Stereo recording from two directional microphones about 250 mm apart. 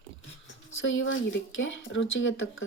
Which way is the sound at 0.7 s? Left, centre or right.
Left.